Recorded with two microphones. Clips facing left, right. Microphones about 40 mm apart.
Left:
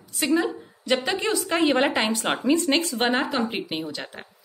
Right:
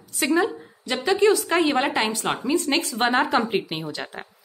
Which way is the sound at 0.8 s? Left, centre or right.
Centre.